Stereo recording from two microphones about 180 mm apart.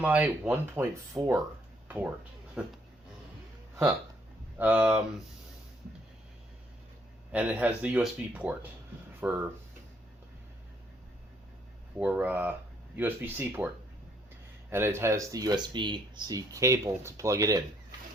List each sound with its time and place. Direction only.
0.0 s speech: 10° right (ahead or behind)
2.6 s speech: 5° right (ahead or behind)
4.5 s speech: 10° right (ahead or behind)
7.3 s speech: 10° right (ahead or behind)
11.9 s speech: 10° right (ahead or behind)
14.7 s speech: 15° right (ahead or behind)